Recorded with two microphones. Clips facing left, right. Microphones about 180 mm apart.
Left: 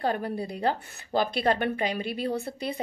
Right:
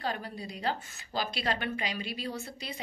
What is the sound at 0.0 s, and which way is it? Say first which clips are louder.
A woman's voice: left 8 dB; 55° left (ahead or behind).